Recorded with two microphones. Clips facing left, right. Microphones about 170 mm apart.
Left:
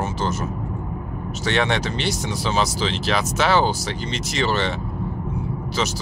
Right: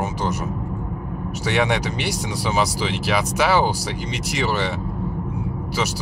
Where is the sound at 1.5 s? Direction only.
10° right (ahead or behind).